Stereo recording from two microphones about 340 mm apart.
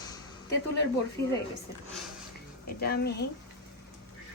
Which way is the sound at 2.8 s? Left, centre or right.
Left.